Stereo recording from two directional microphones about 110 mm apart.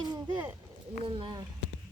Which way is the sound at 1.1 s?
50° right (ahead or behind).